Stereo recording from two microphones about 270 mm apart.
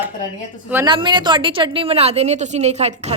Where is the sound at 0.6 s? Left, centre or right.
Centre.